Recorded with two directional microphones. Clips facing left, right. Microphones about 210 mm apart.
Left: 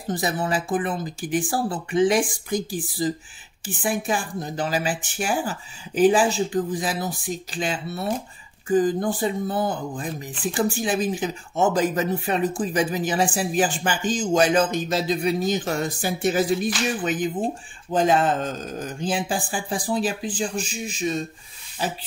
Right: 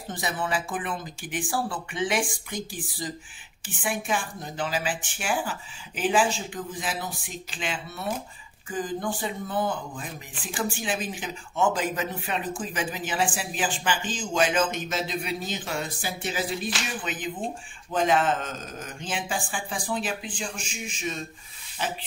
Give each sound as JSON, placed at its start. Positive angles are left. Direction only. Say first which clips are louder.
{"t": 0.1, "sound": "speech", "louder": "left 5 dB", "side_deg": 40}